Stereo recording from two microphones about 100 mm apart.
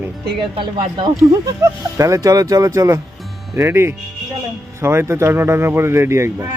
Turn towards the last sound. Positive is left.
turn(degrees=-30)  # may be behind; listen again after turning